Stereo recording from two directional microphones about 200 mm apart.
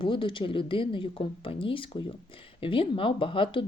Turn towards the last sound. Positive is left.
turn(degrees=25)  # may be behind; listen again after turning